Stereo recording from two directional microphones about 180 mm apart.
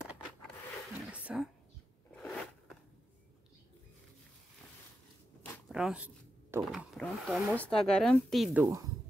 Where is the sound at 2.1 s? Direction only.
5° left (ahead or behind).